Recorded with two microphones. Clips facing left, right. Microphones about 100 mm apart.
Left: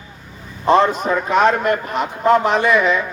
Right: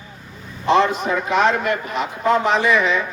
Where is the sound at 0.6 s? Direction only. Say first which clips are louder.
Left 2 dB; 45° left (ahead or behind).